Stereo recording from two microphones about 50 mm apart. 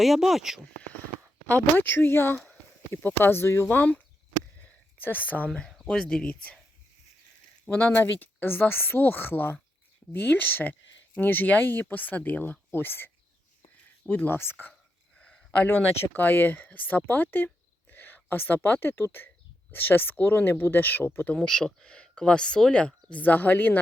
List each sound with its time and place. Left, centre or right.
0.0 s speech: centre
1.5 s speech: left
4.5 s a sound: left
5.8 s speech: centre
7.8 s speech: left
14.1 s speech: left
14.3 s speech: left
14.7 s a sound: centre
16.1 s speech: left
21.3 s speech: centre
23.0 s speech: left